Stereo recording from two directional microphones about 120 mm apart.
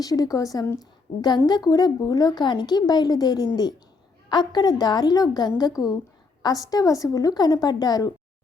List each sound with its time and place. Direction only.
0.0 s a woman's voice: 30° left (ahead or behind)